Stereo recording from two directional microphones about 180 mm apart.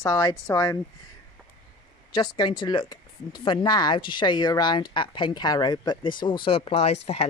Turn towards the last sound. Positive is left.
turn(degrees=35)  # may be behind; listen again after turning